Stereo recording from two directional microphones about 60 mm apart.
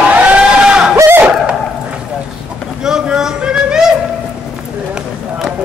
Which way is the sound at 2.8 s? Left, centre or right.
Centre.